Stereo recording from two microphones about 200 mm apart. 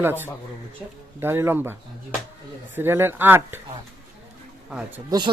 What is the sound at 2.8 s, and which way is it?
Speech, 10° right (ahead or behind).